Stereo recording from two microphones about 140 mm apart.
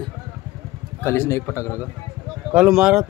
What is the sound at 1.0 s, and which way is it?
Speech, 20° left (ahead or behind).